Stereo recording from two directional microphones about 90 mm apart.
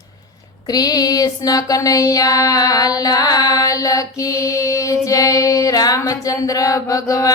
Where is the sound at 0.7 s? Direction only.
45° left (ahead or behind).